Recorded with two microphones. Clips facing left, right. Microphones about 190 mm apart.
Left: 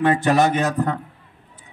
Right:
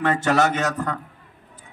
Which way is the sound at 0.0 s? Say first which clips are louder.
Left 3 dB; 15° left (ahead or behind).